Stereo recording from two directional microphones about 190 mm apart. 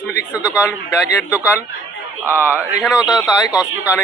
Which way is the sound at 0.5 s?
15° left (ahead or behind).